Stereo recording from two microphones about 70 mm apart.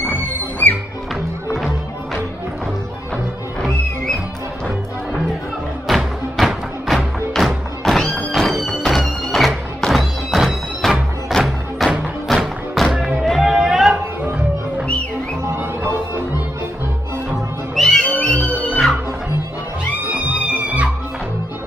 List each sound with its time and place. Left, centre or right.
0.6 s music: left
5.9 s music: centre
12.9 s music: centre
13.4 s a sound: centre
17.7 s music: centre
20.0 s music: right